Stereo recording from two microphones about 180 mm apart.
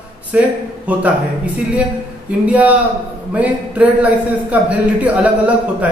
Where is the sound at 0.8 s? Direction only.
10° right (ahead or behind).